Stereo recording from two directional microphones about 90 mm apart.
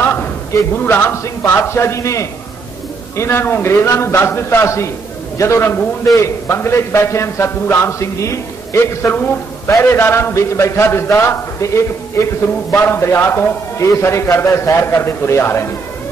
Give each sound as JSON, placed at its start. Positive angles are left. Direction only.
{"t": 0.0, "sound": "a sound", "side_deg": 20}
{"t": 0.7, "sound": "a man's voice", "side_deg": 25}
{"t": 9.0, "sound": "a man's voice", "side_deg": 20}